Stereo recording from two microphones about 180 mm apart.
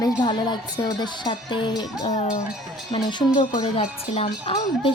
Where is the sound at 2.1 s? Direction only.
40° left (ahead or behind).